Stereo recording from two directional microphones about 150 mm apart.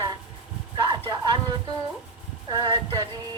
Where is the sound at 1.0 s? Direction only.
30° right (ahead or behind).